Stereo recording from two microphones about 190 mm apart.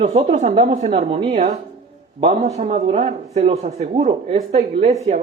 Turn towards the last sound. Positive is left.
turn(degrees=-35)  # may be behind; listen again after turning